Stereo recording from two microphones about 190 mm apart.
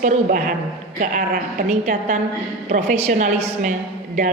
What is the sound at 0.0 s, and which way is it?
A woman's voice, 40° right (ahead or behind).